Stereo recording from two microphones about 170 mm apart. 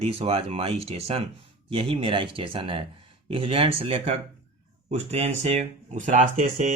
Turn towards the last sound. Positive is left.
turn(degrees=-50)  # may be behind; listen again after turning